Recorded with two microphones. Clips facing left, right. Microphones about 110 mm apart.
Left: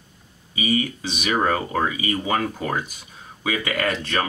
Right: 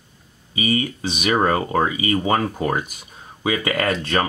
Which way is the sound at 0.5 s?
30° right (ahead or behind).